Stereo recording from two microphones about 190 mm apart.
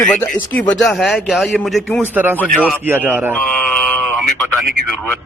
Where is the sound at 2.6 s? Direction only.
10° right (ahead or behind).